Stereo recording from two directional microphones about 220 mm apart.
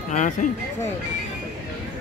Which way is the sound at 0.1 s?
35° left (ahead or behind).